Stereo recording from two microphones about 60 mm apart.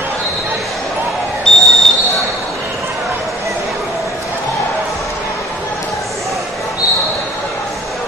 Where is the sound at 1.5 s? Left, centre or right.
Centre.